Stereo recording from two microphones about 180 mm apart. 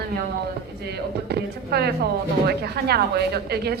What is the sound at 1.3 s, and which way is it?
A woman's voice, 65° right (ahead or behind).